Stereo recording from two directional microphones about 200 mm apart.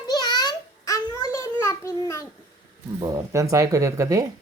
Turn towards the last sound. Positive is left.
turn(degrees=-15)  # may be behind; listen again after turning